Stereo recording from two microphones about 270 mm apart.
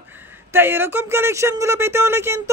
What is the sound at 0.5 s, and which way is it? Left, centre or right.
Speech, centre.